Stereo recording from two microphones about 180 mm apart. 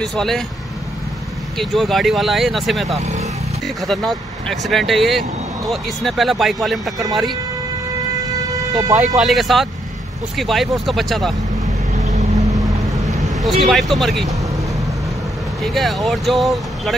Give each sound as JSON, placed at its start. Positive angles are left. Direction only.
{"t": 0.0, "sound": "speech", "side_deg": 0}
{"t": 1.6, "sound": "speech", "side_deg": 0}
{"t": 8.5, "sound": "vehicle", "side_deg": -20}
{"t": 8.9, "sound": "speech", "side_deg": -40}
{"t": 9.2, "sound": "speech", "side_deg": 0}
{"t": 12.0, "sound": "boat", "side_deg": -40}
{"t": 12.5, "sound": "boat", "side_deg": -20}
{"t": 13.4, "sound": "speech", "side_deg": 0}
{"t": 15.6, "sound": "speech", "side_deg": 0}